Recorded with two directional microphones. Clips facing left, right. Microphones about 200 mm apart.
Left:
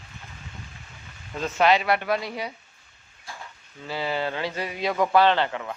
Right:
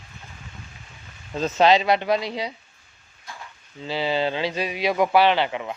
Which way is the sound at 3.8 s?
15° right (ahead or behind).